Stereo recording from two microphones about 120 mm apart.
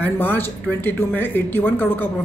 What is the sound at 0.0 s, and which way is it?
Speech, 15° left (ahead or behind).